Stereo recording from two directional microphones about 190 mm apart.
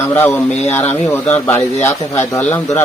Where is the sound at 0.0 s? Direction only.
10° left (ahead or behind).